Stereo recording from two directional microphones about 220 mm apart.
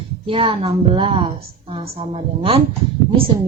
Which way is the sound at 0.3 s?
25° right (ahead or behind).